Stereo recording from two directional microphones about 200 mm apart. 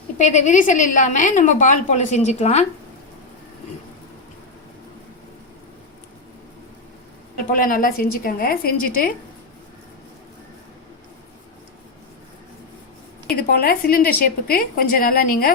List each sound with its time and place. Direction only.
0.2 s a woman's voice: 35° left (ahead or behind)
7.5 s a woman's voice: 45° left (ahead or behind)
13.3 s a woman's voice: 50° left (ahead or behind)